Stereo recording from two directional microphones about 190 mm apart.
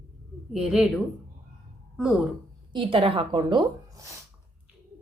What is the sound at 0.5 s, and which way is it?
Speech, centre (ahead or behind).